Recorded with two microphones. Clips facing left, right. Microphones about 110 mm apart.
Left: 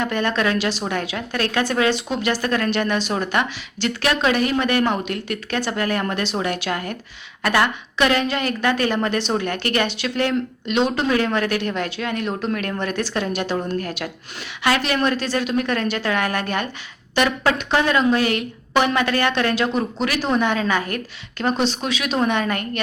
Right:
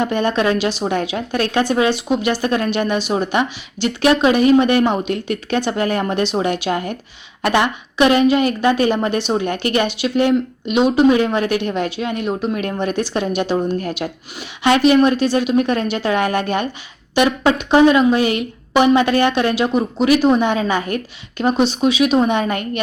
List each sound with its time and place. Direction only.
0.0 s a woman's voice: 20° right (ahead or behind)